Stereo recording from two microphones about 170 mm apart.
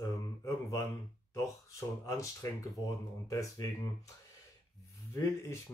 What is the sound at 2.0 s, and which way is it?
Speech, 20° left (ahead or behind).